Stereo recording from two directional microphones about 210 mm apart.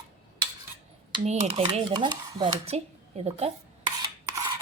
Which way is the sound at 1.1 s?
30° right (ahead or behind).